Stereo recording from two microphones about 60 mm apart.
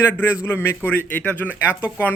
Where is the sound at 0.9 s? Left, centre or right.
Left.